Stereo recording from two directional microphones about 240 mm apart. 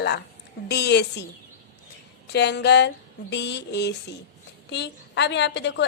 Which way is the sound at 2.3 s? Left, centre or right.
Left.